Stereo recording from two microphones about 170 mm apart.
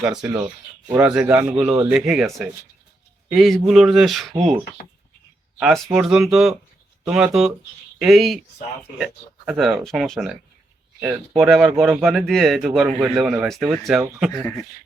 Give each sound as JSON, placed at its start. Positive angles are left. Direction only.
{"t": 0.0, "sound": "speech", "side_deg": -5}
{"t": 5.5, "sound": "speech", "side_deg": -5}